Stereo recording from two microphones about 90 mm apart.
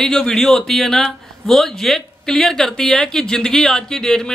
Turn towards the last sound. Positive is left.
turn(degrees=5)  # may be behind; listen again after turning